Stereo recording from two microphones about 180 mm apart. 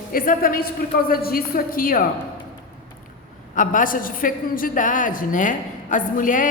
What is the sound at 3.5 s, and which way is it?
A woman's voice, 45° left (ahead or behind).